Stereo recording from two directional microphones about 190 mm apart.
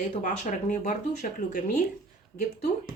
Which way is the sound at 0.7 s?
40° left (ahead or behind).